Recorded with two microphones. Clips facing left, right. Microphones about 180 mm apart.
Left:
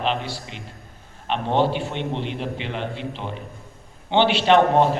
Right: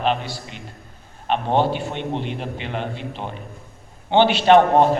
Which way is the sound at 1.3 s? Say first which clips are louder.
Right 1 dB; 50° right (ahead or behind).